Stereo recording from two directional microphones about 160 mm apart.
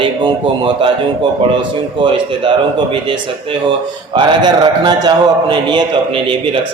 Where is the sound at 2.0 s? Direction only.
30° right (ahead or behind).